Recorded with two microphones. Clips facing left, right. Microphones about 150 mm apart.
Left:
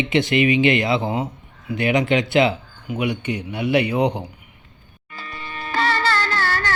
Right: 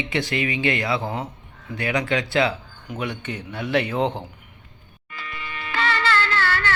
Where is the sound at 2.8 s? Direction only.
10° left (ahead or behind).